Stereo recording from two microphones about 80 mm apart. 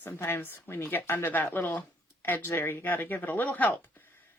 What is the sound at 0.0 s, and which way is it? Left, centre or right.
A woman's voice, left.